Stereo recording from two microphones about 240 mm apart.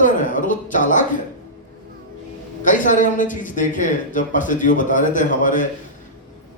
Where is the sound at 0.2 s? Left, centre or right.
Left.